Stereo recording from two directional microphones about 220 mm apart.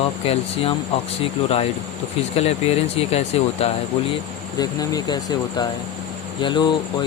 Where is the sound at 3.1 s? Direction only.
30° left (ahead or behind).